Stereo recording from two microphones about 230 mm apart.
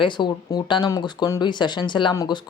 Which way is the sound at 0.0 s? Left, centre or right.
Centre.